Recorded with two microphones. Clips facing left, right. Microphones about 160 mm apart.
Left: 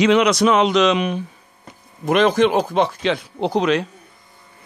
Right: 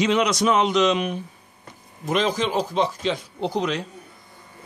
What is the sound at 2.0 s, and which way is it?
Speech, 60° left (ahead or behind).